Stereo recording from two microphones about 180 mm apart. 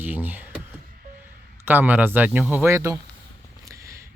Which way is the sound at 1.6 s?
10° right (ahead or behind).